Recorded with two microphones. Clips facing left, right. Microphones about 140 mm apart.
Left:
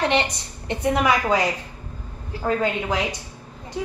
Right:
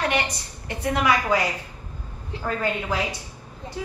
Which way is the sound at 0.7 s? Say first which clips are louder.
Left 2 dB; 20° left (ahead or behind).